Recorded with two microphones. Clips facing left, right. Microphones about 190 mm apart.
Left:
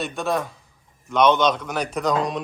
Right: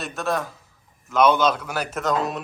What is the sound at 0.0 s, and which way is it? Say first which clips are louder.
A man's voice: left 2 dB; centre (ahead or behind).